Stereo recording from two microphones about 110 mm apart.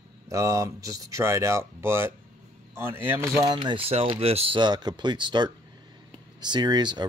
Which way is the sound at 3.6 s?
45° right (ahead or behind).